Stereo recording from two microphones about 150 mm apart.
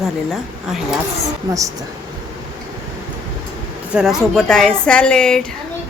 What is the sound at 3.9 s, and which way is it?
Speech, 5° right (ahead or behind).